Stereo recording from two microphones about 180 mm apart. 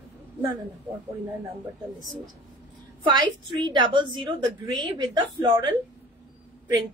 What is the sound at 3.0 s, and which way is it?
A woman's voice, 25° right (ahead or behind).